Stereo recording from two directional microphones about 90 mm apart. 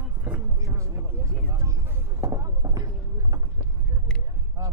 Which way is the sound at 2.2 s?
35° right (ahead or behind).